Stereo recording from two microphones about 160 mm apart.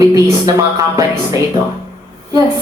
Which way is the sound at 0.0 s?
20° right (ahead or behind).